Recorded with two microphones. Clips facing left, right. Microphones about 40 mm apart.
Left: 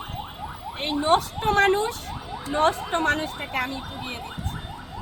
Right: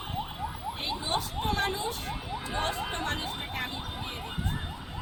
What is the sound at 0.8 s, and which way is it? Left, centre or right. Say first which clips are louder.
Speech: left 12 dB; left.